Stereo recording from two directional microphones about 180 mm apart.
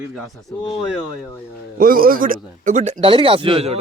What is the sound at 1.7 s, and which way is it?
A man's voice, 50° right (ahead or behind).